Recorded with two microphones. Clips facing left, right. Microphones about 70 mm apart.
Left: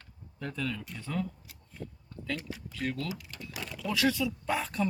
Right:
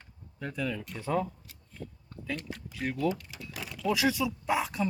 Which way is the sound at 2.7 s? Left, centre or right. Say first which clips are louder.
Right 2 dB; centre.